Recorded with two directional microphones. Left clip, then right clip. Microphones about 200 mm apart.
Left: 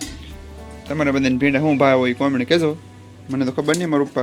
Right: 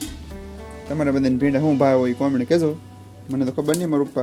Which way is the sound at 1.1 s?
10° right (ahead or behind).